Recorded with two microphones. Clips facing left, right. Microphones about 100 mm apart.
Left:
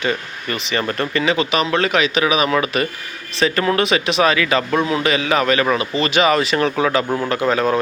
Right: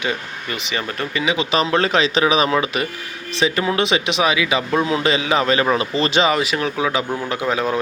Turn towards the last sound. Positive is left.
turn(degrees=-15)  # may be behind; listen again after turning